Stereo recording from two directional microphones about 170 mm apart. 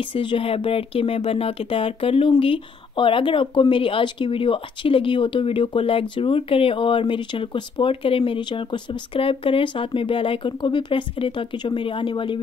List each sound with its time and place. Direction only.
0.0 s speech: 30° left (ahead or behind)